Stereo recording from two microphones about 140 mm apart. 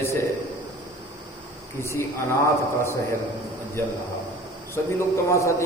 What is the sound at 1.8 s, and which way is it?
Speech, 20° left (ahead or behind).